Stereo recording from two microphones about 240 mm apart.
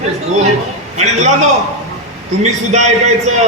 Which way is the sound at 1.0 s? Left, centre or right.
Right.